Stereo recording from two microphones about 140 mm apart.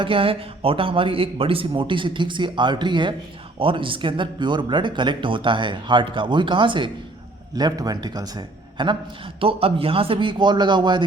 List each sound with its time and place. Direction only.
0.0 s a man's voice: 40° right (ahead or behind)